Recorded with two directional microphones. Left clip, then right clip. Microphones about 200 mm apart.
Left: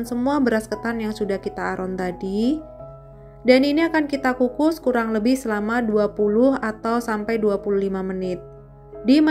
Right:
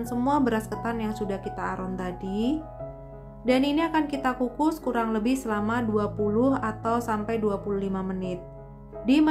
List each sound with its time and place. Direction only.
0.0 s a woman's voice: 20° left (ahead or behind)